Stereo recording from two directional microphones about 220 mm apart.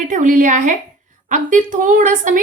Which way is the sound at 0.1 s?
35° right (ahead or behind).